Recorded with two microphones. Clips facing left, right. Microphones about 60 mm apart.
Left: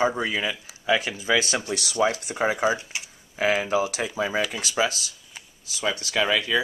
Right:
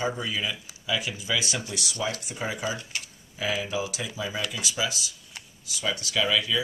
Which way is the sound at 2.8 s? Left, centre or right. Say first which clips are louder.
Left 1 dB; centre.